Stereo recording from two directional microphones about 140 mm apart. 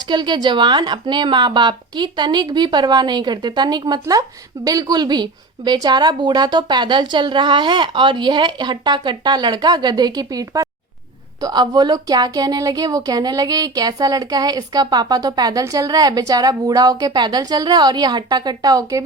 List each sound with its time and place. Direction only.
0.1 s a woman's voice: 30° right (ahead or behind)